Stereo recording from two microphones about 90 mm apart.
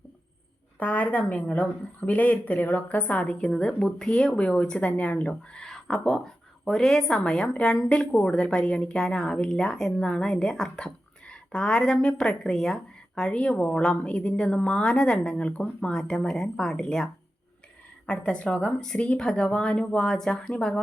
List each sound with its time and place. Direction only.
0.8 s a woman's voice: 20° left (ahead or behind)